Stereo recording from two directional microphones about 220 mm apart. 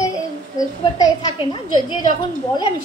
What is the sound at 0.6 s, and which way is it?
A woman's voice, 15° left (ahead or behind).